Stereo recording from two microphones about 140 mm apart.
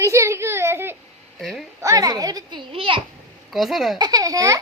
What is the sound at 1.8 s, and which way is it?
A child's voice, 25° right (ahead or behind).